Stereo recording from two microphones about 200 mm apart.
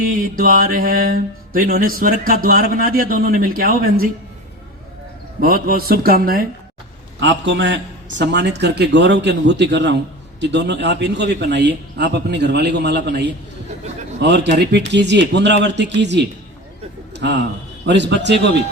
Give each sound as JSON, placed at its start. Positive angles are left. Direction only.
{"t": 0.0, "sound": "mantra", "side_deg": -45}
{"t": 5.4, "sound": "mantra", "side_deg": -50}
{"t": 7.2, "sound": "a man's voice", "side_deg": -65}